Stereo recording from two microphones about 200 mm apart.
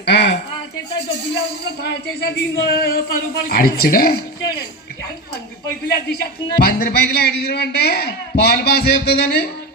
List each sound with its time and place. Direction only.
0.0 s speech: 55° left (ahead or behind)
1.6 s speech: 55° left (ahead or behind)
6.6 s speech: 50° left (ahead or behind)